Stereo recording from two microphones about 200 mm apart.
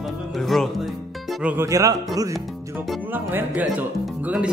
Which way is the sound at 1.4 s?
15° right (ahead or behind).